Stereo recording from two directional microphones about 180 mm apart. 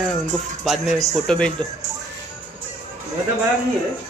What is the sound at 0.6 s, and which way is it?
Speech, centre (ahead or behind).